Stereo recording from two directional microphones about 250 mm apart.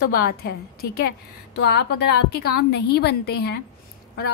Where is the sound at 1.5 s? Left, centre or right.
Left.